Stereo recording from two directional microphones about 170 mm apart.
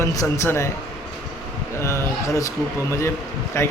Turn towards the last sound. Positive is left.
turn(degrees=15)  # may be behind; listen again after turning